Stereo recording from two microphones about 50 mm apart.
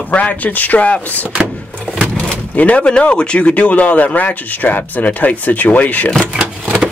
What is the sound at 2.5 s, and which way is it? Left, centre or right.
Speech, left.